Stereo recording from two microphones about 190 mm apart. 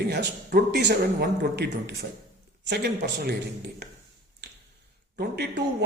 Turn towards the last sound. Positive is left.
turn(degrees=-60)  # may be behind; listen again after turning